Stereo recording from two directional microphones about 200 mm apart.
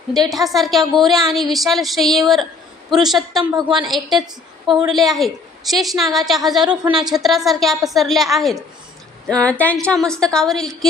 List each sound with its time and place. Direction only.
0.3 s a woman's voice: centre (ahead or behind)
3.5 s a woman's voice: 25° right (ahead or behind)
3.8 s a woman's voice: centre (ahead or behind)